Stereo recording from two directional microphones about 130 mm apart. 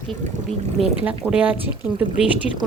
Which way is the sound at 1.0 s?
10° right (ahead or behind).